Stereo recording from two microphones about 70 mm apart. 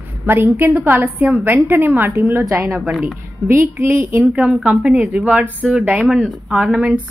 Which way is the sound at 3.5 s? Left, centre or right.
Right.